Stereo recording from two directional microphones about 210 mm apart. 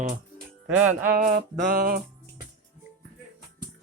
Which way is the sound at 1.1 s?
40° right (ahead or behind).